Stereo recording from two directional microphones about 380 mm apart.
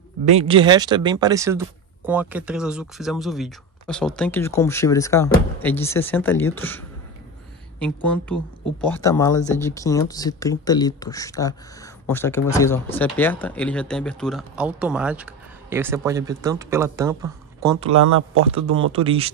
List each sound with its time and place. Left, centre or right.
0.2 s speech: centre
7.8 s speech: centre
18.0 s speech: right
18.9 s speech: centre